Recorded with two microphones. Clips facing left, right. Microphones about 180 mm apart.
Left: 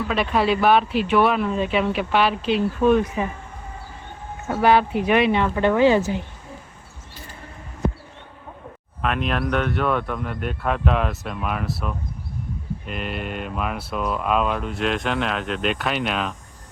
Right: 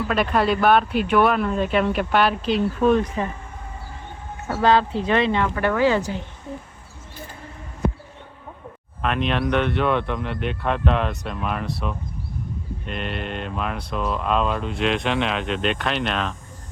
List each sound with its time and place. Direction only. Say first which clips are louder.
0.1 s speech: even; centre (ahead or behind)
4.6 s a woman's voice: left 1 dB; 15° left (ahead or behind)
9.0 s speech: right 1 dB; centre (ahead or behind)